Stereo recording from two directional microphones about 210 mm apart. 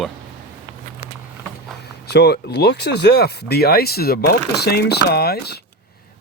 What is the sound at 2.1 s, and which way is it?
Speech, 50° left (ahead or behind).